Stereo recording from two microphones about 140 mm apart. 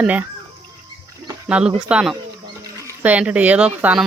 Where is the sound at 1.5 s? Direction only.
10° right (ahead or behind).